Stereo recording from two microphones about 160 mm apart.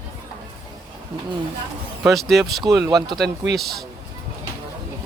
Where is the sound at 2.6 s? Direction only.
20° right (ahead or behind).